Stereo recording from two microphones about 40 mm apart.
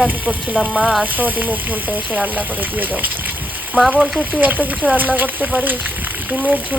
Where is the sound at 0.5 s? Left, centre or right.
Centre.